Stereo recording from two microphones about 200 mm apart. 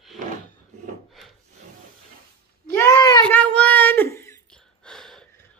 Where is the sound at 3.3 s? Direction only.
5° left (ahead or behind).